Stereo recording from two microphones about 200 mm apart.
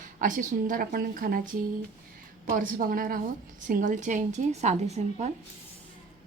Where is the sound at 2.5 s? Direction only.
45° right (ahead or behind).